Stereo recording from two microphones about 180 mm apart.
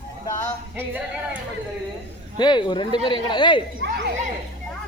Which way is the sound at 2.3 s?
25° left (ahead or behind).